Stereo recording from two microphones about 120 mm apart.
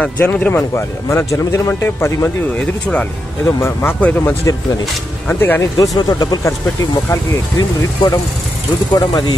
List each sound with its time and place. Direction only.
0.0 s speech: 15° left (ahead or behind)
5.8 s speech: 35° left (ahead or behind)